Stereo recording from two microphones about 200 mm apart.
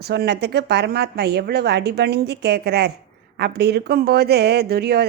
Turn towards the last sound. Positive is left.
turn(degrees=-50)  # may be behind; listen again after turning